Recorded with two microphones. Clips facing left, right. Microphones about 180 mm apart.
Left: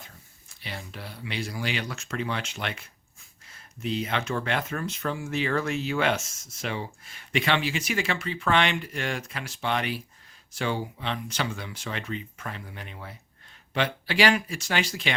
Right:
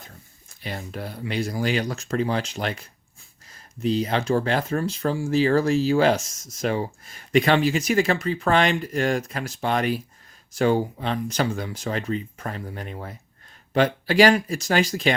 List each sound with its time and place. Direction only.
0.6 s speech: 45° right (ahead or behind)